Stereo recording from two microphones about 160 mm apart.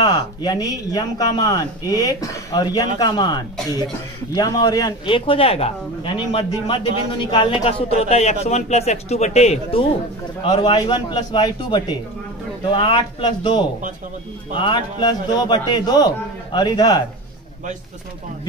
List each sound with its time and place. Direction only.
0.1 s a man's voice: 25° left (ahead or behind)